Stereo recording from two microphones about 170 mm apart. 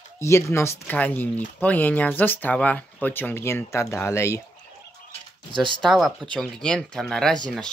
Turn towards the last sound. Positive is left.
turn(degrees=5)  # may be behind; listen again after turning